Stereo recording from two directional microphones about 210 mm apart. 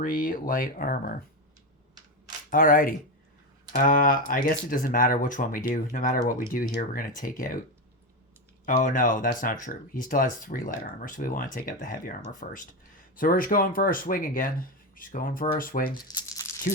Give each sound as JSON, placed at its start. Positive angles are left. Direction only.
{"t": 0.0, "sound": "speech", "side_deg": 40}
{"t": 2.5, "sound": "speech", "side_deg": 40}
{"t": 8.6, "sound": "speech", "side_deg": 40}
{"t": 16.0, "sound": "a sound", "side_deg": 15}